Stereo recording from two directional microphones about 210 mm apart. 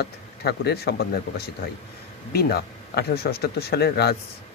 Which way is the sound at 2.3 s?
50° left (ahead or behind).